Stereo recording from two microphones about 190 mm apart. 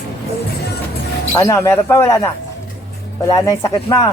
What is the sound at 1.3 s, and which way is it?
Speech, 15° left (ahead or behind).